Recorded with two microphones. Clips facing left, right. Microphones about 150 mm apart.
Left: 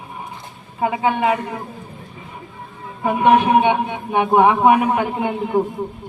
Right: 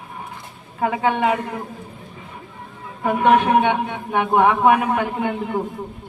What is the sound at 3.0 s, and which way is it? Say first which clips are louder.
A man's voice: left 1 dB; 10° left (ahead or behind).